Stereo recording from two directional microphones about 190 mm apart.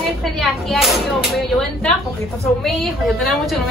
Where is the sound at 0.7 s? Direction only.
Centre (ahead or behind).